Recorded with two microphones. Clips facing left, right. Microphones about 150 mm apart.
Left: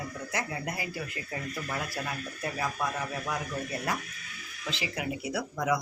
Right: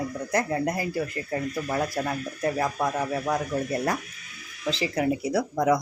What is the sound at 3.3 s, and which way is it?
Speech, 40° right (ahead or behind).